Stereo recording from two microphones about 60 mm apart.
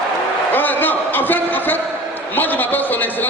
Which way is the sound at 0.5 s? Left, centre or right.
Left.